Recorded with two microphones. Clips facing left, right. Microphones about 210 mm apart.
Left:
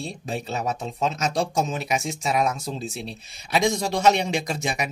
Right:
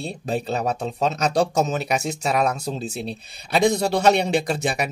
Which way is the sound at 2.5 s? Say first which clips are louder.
Right 2 dB; 70° right (ahead or behind).